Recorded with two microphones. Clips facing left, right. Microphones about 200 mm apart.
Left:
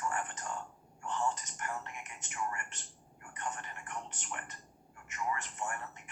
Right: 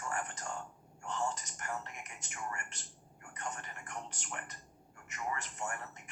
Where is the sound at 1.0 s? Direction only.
40° right (ahead or behind).